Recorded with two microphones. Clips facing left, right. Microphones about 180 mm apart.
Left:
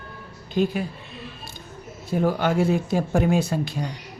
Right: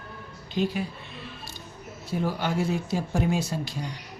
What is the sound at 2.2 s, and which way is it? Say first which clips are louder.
Speech: left 6 dB; 55° left (ahead or behind).